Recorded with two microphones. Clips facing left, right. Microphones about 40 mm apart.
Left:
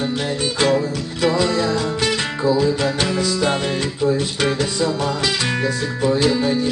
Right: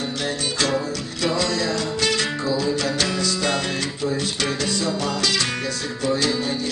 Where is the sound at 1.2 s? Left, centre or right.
Left.